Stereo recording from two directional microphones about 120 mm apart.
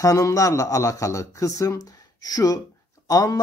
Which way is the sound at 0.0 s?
25° left (ahead or behind).